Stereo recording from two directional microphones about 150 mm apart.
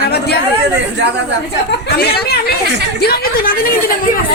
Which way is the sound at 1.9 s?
90° left.